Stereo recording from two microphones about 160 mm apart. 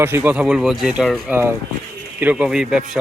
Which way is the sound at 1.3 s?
15° right (ahead or behind).